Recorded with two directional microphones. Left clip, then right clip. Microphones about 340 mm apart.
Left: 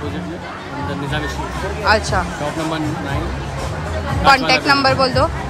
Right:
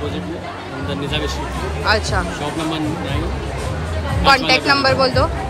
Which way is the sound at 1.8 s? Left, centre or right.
Centre.